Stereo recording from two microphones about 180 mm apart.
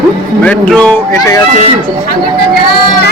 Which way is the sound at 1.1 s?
15° left (ahead or behind).